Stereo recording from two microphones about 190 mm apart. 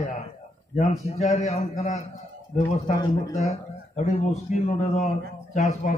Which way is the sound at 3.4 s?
35° left (ahead or behind).